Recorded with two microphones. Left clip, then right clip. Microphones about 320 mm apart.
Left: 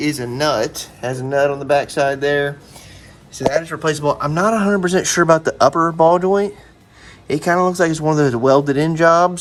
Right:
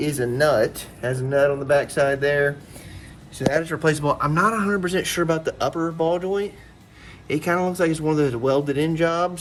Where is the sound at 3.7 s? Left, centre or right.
Centre.